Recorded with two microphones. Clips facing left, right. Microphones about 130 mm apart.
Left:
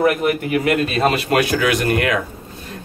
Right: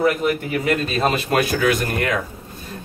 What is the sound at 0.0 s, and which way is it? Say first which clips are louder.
Speech: left 2 dB; 60° left (ahead or behind).